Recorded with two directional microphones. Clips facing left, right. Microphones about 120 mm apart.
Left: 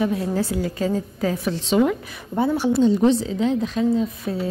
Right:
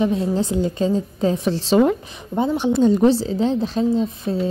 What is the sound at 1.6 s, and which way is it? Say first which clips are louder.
Speech: right 3 dB; 35° right (ahead or behind).